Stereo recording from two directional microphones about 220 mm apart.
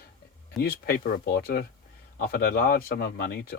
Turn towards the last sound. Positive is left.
turn(degrees=45)  # may be behind; listen again after turning